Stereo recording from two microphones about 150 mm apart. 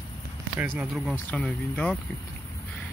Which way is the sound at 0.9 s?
Centre (ahead or behind).